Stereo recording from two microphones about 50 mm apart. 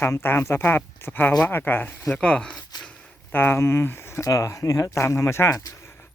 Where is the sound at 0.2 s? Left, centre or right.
Left.